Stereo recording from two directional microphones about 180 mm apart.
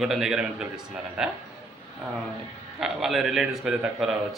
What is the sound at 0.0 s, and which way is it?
A man's voice, centre (ahead or behind).